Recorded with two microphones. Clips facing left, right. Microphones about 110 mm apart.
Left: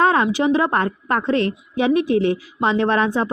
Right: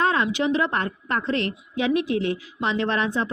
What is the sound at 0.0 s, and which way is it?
A woman's voice, 45° left (ahead or behind).